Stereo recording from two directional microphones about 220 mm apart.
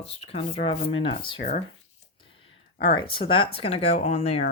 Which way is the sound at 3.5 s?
25° left (ahead or behind).